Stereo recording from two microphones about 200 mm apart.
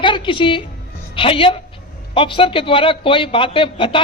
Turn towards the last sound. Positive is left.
turn(degrees=25)  # may be behind; listen again after turning